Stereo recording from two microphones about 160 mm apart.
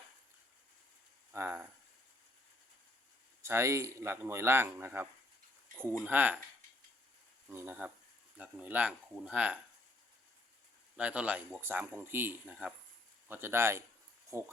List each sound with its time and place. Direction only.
1.3 s speech: 15° right (ahead or behind)
3.4 s speech: 15° right (ahead or behind)
7.5 s speech: 15° right (ahead or behind)
10.9 s speech: 5° right (ahead or behind)